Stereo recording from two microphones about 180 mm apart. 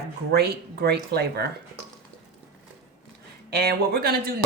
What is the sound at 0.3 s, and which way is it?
Speech, 60° right (ahead or behind).